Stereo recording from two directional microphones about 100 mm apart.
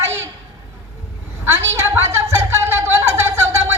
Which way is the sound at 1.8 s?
25° right (ahead or behind).